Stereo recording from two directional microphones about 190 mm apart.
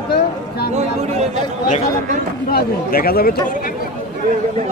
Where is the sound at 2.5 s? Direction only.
50° left (ahead or behind).